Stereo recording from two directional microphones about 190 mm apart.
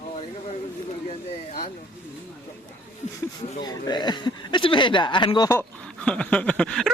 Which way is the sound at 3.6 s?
20° left (ahead or behind).